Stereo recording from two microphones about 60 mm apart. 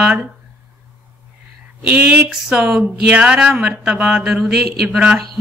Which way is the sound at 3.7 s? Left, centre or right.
Right.